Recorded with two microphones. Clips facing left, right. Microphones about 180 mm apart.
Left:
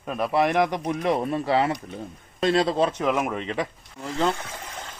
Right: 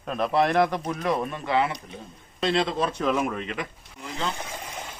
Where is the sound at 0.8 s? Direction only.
30° left (ahead or behind); by 2.7 s 45° left (ahead or behind).